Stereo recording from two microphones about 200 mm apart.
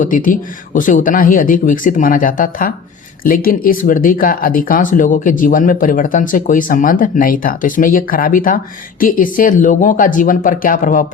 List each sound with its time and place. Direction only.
0.0 s speech: 40° left (ahead or behind)